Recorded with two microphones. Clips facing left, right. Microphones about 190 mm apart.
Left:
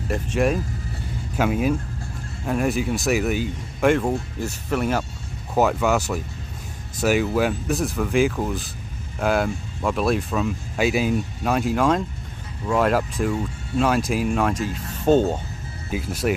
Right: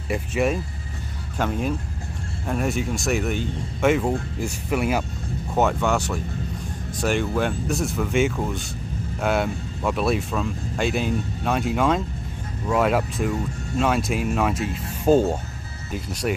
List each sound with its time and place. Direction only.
0.1 s speech: 5° right (ahead or behind)
1.3 s speech: 5° left (ahead or behind); by 5.0 s 10° right (ahead or behind)
5.6 s speech: 5° left (ahead or behind)
15.9 s speech: 5° left (ahead or behind)